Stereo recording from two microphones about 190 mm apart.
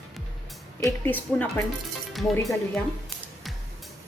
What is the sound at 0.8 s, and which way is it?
Speech, 10° left (ahead or behind).